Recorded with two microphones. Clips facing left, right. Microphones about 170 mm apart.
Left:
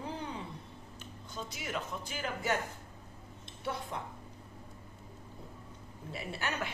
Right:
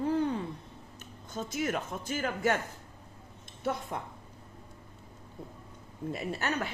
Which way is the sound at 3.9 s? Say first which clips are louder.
Right 3 dB; 50° right (ahead or behind).